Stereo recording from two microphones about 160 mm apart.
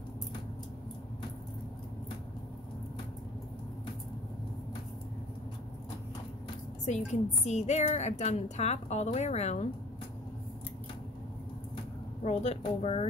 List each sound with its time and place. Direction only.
6.9 s a woman's voice: 45° left (ahead or behind)
12.2 s speech: 40° left (ahead or behind)